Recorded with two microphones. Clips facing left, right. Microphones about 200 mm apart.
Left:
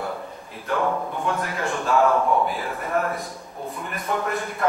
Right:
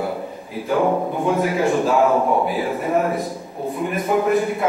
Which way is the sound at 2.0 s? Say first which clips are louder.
Right 3 dB; 15° right (ahead or behind).